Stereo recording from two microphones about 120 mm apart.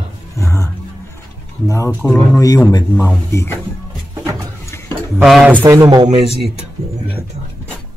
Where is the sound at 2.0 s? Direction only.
20° left (ahead or behind).